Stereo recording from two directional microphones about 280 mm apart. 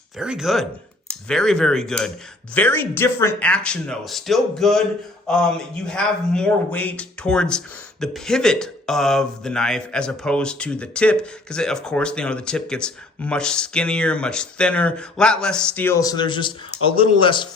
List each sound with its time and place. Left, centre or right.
0.2 s speech: centre